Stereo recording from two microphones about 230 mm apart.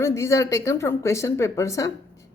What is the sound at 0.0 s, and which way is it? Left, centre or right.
A woman's voice, centre.